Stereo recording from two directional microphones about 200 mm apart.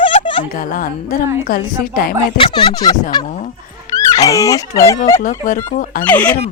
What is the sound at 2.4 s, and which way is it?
Speech, 20° left (ahead or behind).